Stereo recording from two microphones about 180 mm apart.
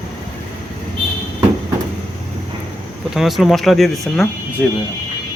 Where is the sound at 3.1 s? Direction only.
Centre (ahead or behind).